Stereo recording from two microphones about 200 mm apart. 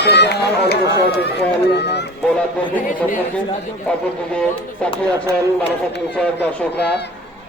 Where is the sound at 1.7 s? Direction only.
55° left (ahead or behind).